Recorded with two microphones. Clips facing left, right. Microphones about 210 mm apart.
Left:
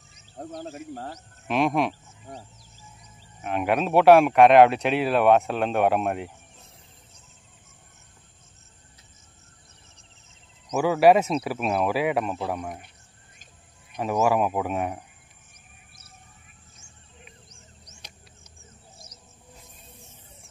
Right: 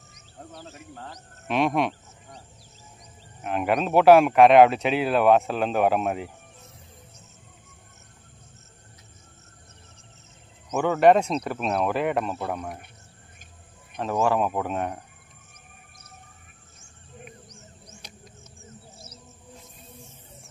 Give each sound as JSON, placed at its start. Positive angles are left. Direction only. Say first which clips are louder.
{"t": 0.4, "sound": "speech", "louder": "left 7 dB", "side_deg": 45}
{"t": 1.5, "sound": "speech", "louder": "even", "side_deg": 0}
{"t": 3.3, "sound": "speech", "louder": "even", "side_deg": 0}
{"t": 10.7, "sound": "speech", "louder": "even", "side_deg": 5}
{"t": 13.9, "sound": "speech", "louder": "left 1 dB", "side_deg": 10}